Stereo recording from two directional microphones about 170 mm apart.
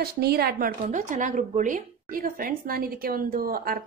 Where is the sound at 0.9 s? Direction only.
45° right (ahead or behind).